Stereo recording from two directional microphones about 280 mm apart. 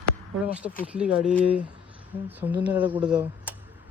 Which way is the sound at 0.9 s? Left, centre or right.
Centre.